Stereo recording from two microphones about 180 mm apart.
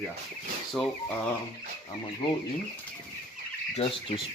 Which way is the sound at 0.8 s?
5° left (ahead or behind).